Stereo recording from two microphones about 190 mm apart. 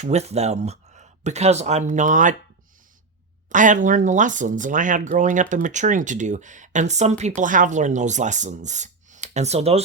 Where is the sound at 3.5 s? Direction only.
40° right (ahead or behind).